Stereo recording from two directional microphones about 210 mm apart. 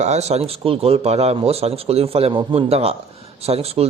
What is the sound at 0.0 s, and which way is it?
Speech, 30° right (ahead or behind).